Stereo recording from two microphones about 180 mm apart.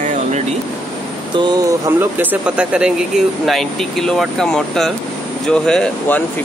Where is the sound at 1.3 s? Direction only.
25° right (ahead or behind).